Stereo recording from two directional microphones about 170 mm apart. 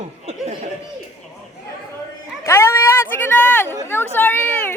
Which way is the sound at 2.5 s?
15° left (ahead or behind).